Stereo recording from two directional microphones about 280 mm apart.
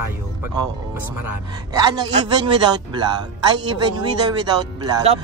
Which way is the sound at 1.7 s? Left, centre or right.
Centre.